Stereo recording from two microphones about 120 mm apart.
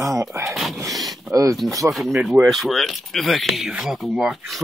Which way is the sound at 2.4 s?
Centre (ahead or behind).